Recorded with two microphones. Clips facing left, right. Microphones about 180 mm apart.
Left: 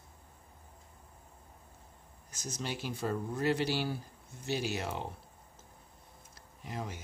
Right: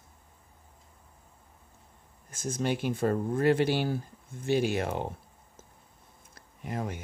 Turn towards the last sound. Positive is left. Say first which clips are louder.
# right 6 dB
turn(degrees=-55)  # may be behind; listen again after turning